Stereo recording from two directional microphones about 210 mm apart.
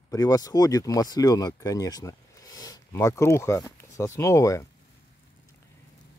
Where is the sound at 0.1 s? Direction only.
15° left (ahead or behind).